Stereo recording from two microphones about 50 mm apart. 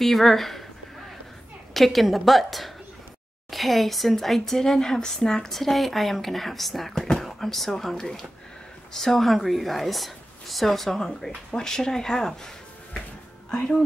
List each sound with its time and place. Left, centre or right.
0.0 s a woman's voice: centre
1.7 s a woman's voice: centre